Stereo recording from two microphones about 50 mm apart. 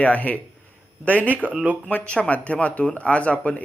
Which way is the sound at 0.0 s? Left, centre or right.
Left.